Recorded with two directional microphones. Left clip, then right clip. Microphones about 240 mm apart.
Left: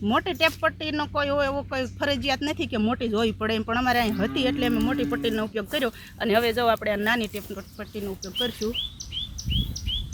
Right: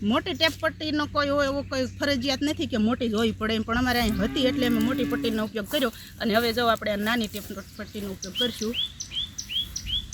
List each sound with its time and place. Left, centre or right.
0.0 s speech: centre
9.0 s chirp: left